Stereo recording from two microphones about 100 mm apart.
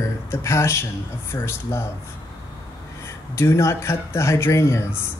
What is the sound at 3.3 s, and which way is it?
Speech, 30° left (ahead or behind).